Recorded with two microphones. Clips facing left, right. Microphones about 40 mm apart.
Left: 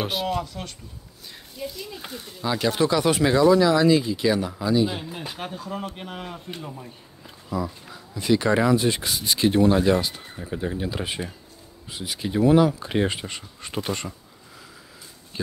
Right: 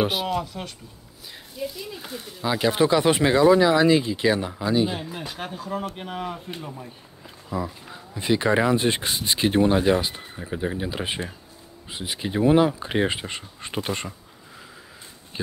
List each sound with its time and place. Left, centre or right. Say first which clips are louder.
0.0 s speech: right 2 dB; centre
5.4 s speech: right 3 dB; centre
7.9 s speech: left 2 dB; right
8.7 s speech: even; right